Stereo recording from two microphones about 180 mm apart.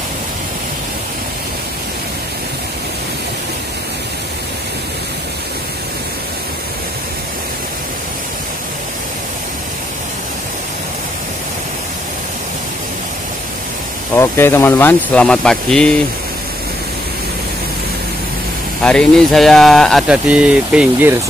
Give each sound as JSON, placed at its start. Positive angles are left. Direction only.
{"t": 14.1, "sound": "speech", "side_deg": 15}
{"t": 18.8, "sound": "speech", "side_deg": 5}